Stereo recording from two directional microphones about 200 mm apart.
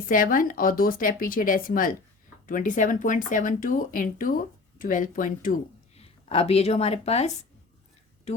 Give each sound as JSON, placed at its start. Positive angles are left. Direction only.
{"t": 0.1, "sound": "speech", "side_deg": 45}